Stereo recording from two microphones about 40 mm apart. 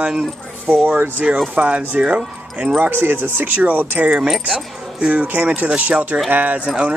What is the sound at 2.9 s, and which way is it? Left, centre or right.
Speech, right.